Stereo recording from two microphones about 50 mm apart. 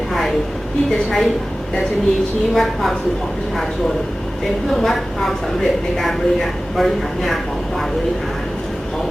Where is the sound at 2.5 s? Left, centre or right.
Centre.